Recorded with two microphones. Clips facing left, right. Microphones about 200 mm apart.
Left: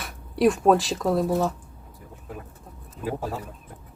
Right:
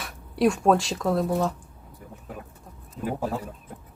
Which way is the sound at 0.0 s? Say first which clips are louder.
Left 2 dB; centre (ahead or behind).